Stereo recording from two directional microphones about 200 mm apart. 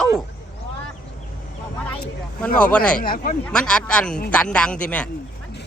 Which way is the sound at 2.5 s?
45° left (ahead or behind).